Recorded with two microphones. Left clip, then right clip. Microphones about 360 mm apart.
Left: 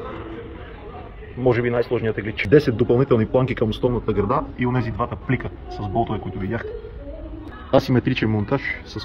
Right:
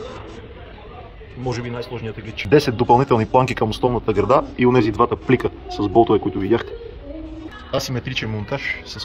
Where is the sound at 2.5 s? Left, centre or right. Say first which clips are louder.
Right 3 dB; centre.